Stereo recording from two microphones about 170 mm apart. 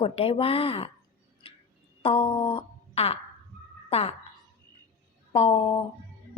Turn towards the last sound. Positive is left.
turn(degrees=35)  # may be behind; listen again after turning